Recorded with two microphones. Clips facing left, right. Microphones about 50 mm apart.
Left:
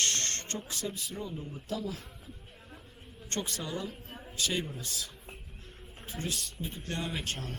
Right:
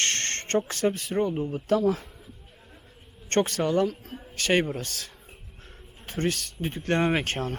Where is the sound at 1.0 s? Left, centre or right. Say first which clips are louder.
Right 13 dB; right.